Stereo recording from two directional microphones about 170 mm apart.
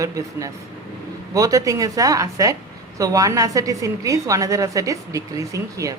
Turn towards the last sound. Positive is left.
turn(degrees=-20)  # may be behind; listen again after turning